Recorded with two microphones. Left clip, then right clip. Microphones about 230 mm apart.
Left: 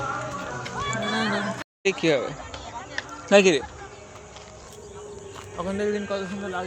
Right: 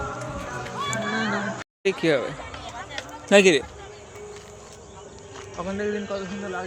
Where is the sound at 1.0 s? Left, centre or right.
Left.